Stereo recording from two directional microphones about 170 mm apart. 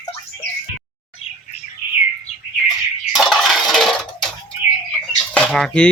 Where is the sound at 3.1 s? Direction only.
Centre (ahead or behind).